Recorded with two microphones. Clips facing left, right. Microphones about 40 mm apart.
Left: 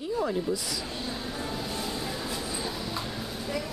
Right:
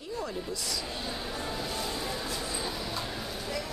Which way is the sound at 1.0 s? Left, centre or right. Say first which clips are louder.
Left 1 dB; centre.